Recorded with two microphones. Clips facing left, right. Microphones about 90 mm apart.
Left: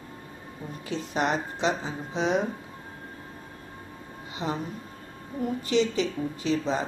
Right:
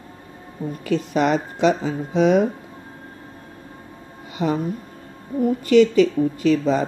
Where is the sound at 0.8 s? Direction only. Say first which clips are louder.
Right 8 dB; 65° right (ahead or behind).